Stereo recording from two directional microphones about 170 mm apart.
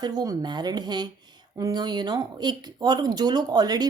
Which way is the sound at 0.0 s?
20° right (ahead or behind).